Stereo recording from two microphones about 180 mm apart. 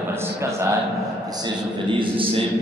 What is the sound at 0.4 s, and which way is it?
Speech, 15° right (ahead or behind).